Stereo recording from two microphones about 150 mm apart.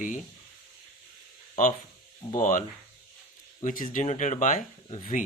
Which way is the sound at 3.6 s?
60° left (ahead or behind).